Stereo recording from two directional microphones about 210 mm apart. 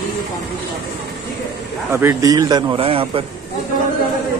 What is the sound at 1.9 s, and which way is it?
Speech, 15° right (ahead or behind).